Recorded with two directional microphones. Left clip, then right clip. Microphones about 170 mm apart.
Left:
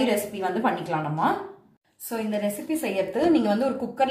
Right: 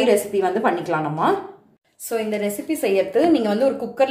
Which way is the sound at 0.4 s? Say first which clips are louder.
Right 6 dB; 25° right (ahead or behind).